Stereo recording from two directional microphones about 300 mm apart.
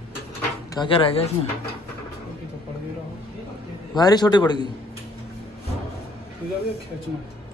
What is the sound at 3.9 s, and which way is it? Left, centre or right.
Speech, centre.